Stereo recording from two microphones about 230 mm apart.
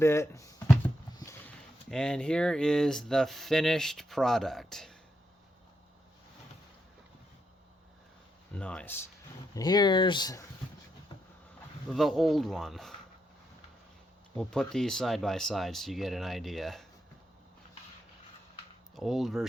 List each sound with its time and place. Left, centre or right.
0.0 s speech: centre
1.1 s a sound: centre
1.9 s speech: centre
8.5 s speech: centre
9.6 s speech: centre
11.9 s speech: centre
14.3 s speech: centre
18.9 s speech: centre